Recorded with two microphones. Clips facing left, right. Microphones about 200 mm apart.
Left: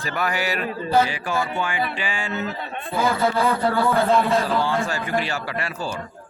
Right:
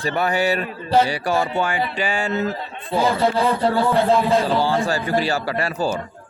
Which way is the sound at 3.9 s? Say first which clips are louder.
Right 2 dB; 35° right (ahead or behind).